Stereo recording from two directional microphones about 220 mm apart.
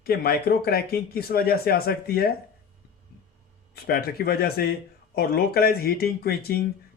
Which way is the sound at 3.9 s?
45° left (ahead or behind).